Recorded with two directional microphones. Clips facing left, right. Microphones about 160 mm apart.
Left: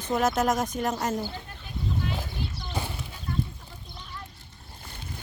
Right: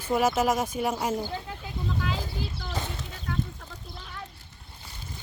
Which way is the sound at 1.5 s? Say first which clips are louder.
Right 1 dB; 90° right.